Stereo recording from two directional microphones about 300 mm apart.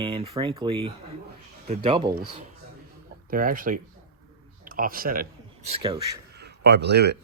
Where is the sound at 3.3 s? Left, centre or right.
Right.